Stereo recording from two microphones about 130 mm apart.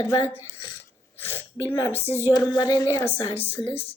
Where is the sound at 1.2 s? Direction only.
15° left (ahead or behind).